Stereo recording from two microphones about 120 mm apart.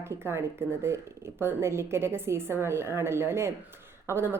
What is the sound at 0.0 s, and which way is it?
Speech, 20° right (ahead or behind).